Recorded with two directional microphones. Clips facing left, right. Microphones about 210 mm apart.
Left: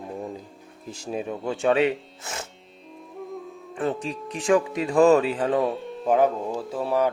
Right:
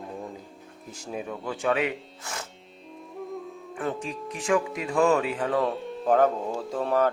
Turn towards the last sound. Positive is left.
turn(degrees=10)  # may be behind; listen again after turning